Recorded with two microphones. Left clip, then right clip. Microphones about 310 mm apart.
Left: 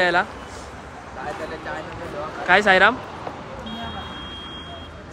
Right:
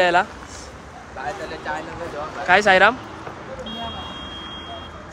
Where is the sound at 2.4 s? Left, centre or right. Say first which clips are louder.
Right 1 dB; centre.